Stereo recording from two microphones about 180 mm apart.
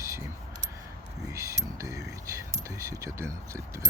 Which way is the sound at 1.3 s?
15° right (ahead or behind).